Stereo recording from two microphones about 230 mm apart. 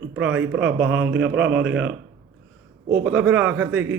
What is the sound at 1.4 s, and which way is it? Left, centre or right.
Speech, right.